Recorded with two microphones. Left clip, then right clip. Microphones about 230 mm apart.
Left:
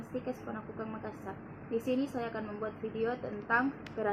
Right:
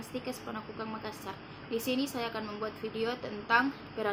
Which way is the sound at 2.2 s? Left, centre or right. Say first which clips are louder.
Right 2 dB; centre.